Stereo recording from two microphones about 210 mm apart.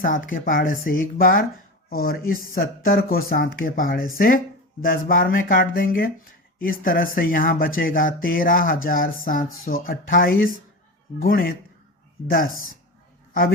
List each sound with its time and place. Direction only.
0.0 s speech: 40° left (ahead or behind)